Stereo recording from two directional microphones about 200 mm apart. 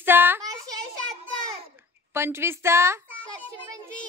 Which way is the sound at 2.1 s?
10° right (ahead or behind).